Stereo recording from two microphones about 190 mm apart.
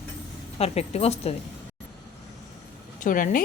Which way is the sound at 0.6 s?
35° left (ahead or behind).